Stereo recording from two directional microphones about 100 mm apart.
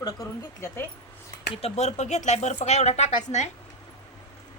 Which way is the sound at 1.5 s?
85° left.